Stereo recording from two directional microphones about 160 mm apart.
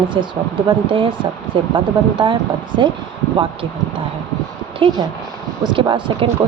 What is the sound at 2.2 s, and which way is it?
Speech, 30° right (ahead or behind).